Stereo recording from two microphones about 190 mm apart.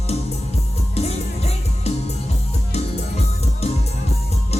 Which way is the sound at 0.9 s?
35° left (ahead or behind).